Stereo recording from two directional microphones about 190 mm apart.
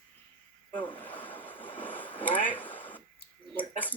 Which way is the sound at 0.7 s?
10° left (ahead or behind).